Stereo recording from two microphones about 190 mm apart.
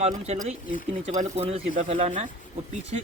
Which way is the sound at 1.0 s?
35° right (ahead or behind).